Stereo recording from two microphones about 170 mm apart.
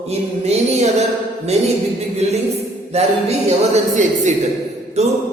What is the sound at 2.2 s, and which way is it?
Speech, 40° right (ahead or behind).